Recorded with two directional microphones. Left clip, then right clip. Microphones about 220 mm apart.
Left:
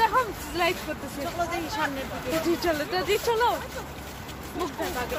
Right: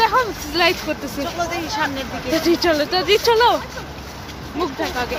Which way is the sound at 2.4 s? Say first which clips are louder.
Right 11 dB; 40° right (ahead or behind).